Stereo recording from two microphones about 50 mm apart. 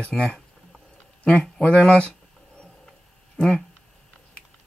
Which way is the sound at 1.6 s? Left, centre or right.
Left.